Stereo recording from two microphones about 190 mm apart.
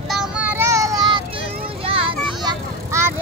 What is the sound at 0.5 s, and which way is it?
Child singing, 15° right (ahead or behind).